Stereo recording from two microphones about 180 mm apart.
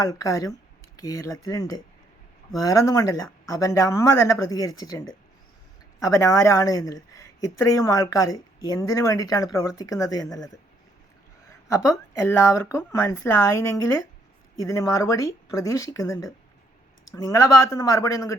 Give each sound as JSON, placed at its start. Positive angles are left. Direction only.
{"t": 0.0, "sound": "speech", "side_deg": 20}
{"t": 11.8, "sound": "speech", "side_deg": 15}